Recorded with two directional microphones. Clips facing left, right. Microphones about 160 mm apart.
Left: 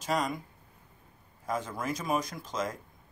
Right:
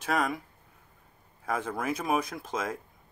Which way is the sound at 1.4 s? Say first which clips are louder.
Right 2 dB; 60° right (ahead or behind).